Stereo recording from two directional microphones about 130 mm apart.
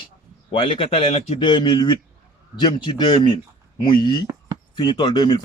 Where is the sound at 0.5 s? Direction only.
45° left (ahead or behind).